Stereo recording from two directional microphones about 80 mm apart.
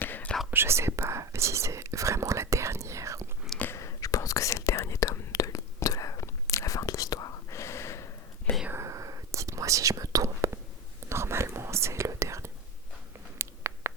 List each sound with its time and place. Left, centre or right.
0.0 s whispering: left
0.5 s whispering: right
3.8 s whispering: left
8.7 s whispering: right
13.4 s a sound: right